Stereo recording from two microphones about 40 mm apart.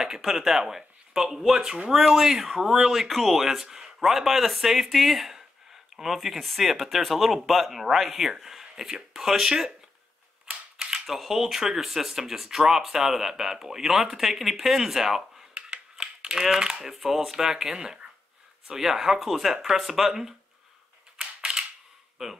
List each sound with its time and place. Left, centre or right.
0.2 s speech: centre
10.5 s mechanisms: centre
11.1 s speech: centre
15.5 s computer keyboard: centre
16.8 s speech: centre
21.2 s mechanisms: centre
22.2 s speech: centre